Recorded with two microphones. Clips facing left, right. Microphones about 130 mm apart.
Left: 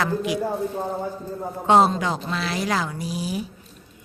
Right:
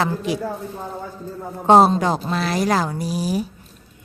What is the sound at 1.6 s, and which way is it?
A woman's voice, 35° right (ahead or behind).